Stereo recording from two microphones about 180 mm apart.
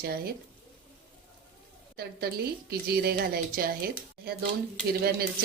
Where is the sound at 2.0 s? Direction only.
60° right (ahead or behind).